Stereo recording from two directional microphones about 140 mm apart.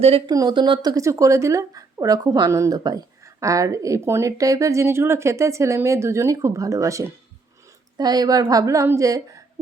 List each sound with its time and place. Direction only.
0.3 s speech: 30° right (ahead or behind)